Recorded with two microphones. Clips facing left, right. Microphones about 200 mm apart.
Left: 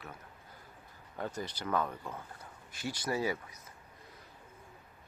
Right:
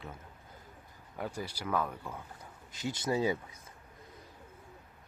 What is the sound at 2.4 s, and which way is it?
Speech, 20° right (ahead or behind).